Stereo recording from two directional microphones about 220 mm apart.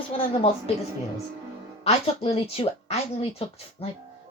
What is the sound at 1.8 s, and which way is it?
Speech, 25° left (ahead or behind).